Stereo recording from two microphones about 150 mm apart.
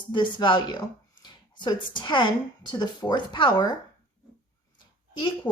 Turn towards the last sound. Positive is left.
turn(degrees=10)  # may be behind; listen again after turning